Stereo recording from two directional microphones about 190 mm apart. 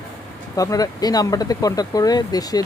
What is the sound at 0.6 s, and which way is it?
Speech, 20° left (ahead or behind).